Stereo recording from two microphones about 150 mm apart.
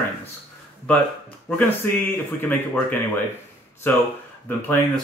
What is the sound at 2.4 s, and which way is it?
Speech, 15° left (ahead or behind).